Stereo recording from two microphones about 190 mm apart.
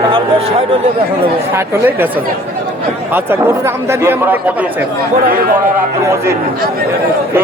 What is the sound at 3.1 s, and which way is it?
Speech, 10° right (ahead or behind).